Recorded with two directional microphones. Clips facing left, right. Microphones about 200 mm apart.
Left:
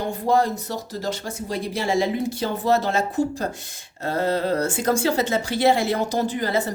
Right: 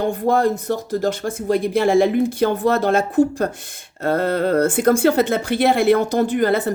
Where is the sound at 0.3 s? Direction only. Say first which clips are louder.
Right 2 dB; 55° right (ahead or behind).